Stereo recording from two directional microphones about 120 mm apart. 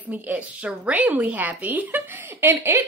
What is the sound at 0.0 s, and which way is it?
A woman's voice, 15° right (ahead or behind).